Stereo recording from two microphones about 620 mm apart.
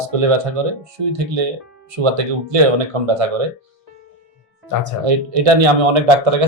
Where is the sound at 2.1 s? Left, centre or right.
Right.